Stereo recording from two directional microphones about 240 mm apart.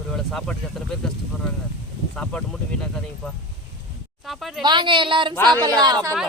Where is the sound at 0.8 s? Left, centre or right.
Centre.